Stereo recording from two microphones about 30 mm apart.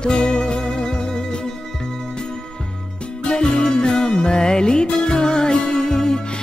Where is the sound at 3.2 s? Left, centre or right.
Left.